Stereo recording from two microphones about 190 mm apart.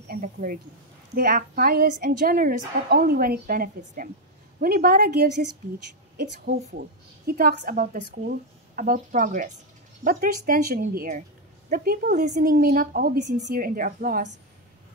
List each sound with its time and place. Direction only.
0.1 s a woman's voice: 45° right (ahead or behind)